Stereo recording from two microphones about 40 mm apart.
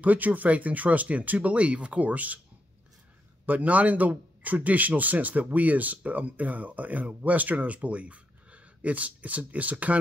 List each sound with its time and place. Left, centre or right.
0.0 s speech: right
3.4 s speech: right